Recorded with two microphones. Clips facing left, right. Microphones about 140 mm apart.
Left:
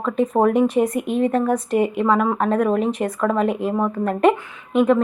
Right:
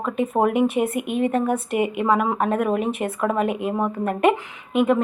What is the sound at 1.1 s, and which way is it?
Speech, 35° left (ahead or behind).